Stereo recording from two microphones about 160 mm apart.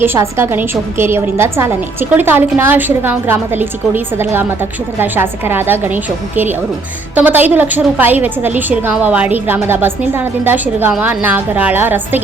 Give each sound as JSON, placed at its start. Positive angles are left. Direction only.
{"t": 0.0, "sound": "a woman's voice", "side_deg": -15}